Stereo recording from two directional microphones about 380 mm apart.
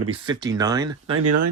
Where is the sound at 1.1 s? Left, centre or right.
Right.